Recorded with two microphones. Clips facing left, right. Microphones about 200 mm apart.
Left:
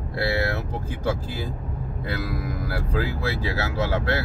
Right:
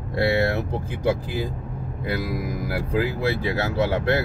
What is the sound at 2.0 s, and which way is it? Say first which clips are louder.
Speech: right 3 dB; 15° right (ahead or behind).